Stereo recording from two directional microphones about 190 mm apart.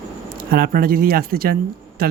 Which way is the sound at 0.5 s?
50° right (ahead or behind).